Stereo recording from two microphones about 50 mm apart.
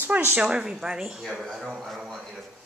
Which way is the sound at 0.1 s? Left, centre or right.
Right.